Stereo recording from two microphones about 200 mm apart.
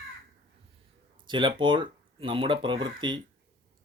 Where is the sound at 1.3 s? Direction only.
25° right (ahead or behind).